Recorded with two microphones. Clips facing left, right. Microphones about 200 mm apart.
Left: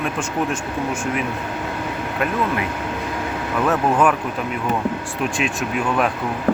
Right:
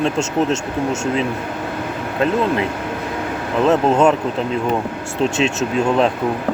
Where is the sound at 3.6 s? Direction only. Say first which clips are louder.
Right 4 dB; 25° right (ahead or behind).